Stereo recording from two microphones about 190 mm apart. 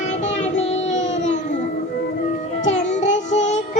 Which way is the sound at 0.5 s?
40° left (ahead or behind).